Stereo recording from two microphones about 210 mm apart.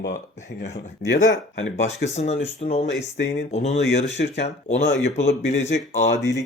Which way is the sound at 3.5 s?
30° left (ahead or behind).